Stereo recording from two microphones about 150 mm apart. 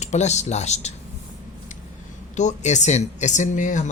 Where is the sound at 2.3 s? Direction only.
50° left (ahead or behind).